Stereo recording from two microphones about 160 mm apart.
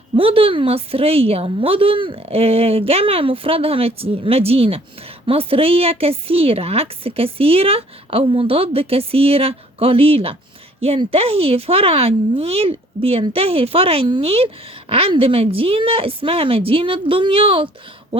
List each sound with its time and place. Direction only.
0.2 s speech: 35° right (ahead or behind)